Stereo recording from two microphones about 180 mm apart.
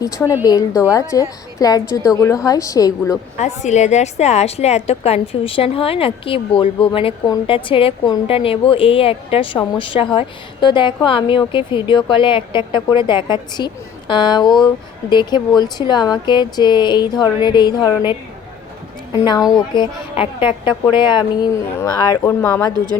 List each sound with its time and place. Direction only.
0.0 s a woman's voice: 20° left (ahead or behind)
3.4 s a woman's voice: 40° left (ahead or behind); by 17.9 s 20° left (ahead or behind)
19.2 s a woman's voice: 25° left (ahead or behind)